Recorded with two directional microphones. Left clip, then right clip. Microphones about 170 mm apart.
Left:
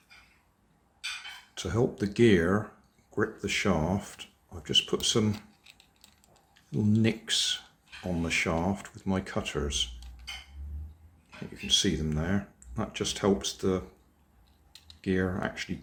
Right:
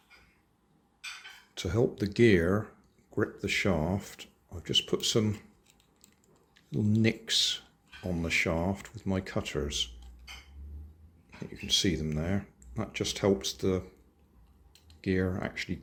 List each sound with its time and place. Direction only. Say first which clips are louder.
1.5 s speech: even; 20° right (ahead or behind)
6.5 s speech: left 2 dB; 20° right (ahead or behind)
11.5 s speech: left 2 dB; 20° right (ahead or behind)
15.0 s speech: left 1 dB; 20° right (ahead or behind)